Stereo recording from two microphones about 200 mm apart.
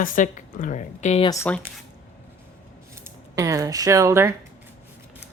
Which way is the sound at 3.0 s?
15° right (ahead or behind).